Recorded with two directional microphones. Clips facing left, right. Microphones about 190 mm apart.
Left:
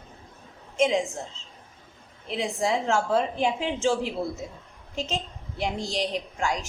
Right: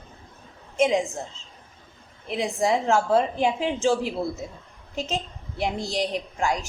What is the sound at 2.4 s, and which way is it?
A woman's voice, 40° right (ahead or behind).